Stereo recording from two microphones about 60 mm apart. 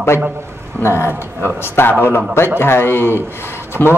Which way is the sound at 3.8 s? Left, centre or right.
Right.